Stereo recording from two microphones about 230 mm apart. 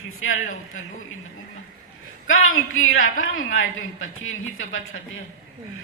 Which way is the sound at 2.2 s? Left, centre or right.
Left.